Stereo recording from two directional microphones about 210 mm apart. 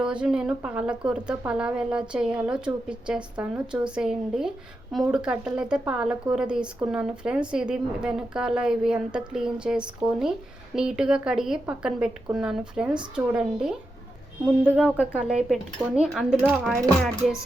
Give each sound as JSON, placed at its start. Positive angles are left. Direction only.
{"t": 0.0, "sound": "a woman's voice", "side_deg": -5}